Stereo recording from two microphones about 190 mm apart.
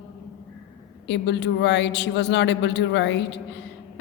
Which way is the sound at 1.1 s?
65° left (ahead or behind).